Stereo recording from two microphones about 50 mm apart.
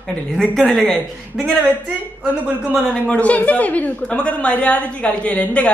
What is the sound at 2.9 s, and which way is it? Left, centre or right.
A woman's voice, left.